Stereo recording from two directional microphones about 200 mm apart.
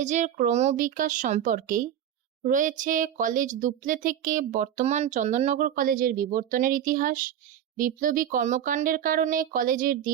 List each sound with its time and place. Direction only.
0.0 s speech: 35° right (ahead or behind)